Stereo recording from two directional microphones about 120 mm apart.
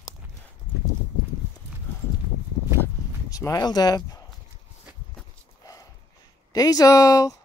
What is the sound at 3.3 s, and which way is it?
Speech, 30° left (ahead or behind).